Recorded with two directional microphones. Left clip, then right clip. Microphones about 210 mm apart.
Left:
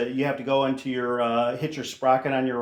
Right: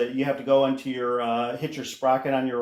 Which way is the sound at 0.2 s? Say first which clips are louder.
Right 3 dB; 40° left (ahead or behind).